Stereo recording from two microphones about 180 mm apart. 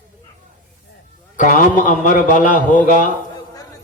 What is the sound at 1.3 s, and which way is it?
Speech, 45° left (ahead or behind).